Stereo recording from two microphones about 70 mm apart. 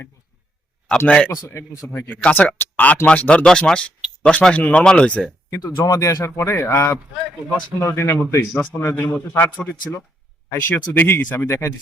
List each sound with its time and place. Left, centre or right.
0.9 s speech: centre
1.6 s speech: left
1.9 s speech: left
2.2 s speech: left
5.5 s speech: left
8.5 s speech: left